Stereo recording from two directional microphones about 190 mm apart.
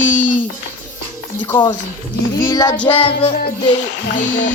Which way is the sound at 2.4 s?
20° left (ahead or behind).